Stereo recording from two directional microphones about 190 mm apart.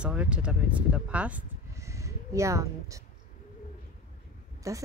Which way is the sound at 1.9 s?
15° right (ahead or behind).